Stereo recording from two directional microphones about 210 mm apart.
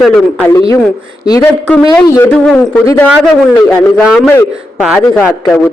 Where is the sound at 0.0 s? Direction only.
5° left (ahead or behind).